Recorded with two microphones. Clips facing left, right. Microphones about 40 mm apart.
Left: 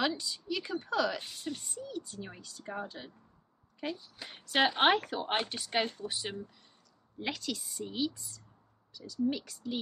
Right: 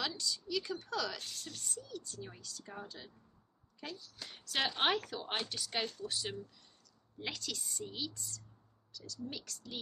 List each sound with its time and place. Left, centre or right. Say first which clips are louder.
0.0 s a woman's voice: left 6 dB; left
7.2 s speech: left 5 dB; centre